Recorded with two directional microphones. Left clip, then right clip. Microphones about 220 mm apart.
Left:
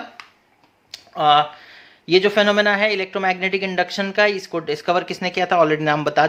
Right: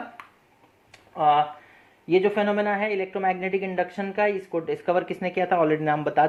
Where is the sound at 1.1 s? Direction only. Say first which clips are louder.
Left 5 dB; 30° left (ahead or behind).